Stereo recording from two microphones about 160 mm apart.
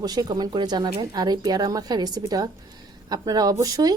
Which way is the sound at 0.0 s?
25° right (ahead or behind).